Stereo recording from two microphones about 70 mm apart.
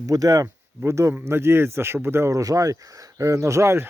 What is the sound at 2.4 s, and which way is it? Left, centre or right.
Speech, right.